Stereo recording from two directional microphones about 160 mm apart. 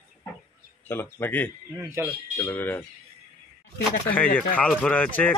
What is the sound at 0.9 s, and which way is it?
Speech, 15° left (ahead or behind).